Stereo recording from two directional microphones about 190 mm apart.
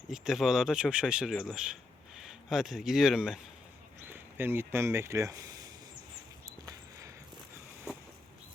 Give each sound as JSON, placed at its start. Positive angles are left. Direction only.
{"t": 0.1, "sound": "speech", "side_deg": 0}